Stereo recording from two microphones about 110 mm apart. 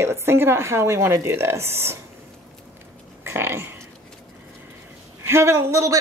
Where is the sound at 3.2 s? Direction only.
20° right (ahead or behind).